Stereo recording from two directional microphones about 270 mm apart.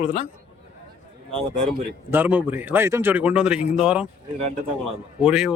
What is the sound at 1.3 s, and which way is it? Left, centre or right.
Speech, centre.